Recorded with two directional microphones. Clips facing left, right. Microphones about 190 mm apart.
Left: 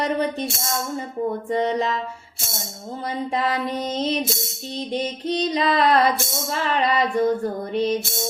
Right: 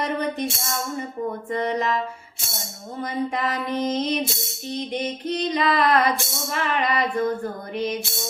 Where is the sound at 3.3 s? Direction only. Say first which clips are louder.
Left 2 dB; 30° left (ahead or behind).